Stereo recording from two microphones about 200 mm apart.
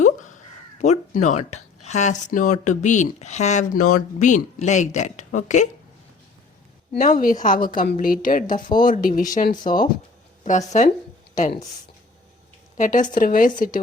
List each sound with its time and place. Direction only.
0.0 s speech: 40° left (ahead or behind)
6.9 s speech: 40° left (ahead or behind)
12.7 s speech: 40° left (ahead or behind)